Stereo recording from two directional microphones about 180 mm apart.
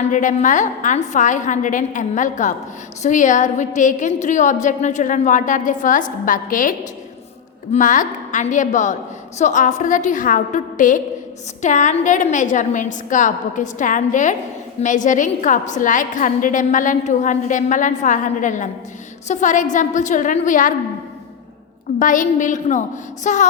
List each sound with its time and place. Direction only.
0.1 s a woman's voice: 45° left (ahead or behind)
21.9 s a woman's voice: 45° left (ahead or behind)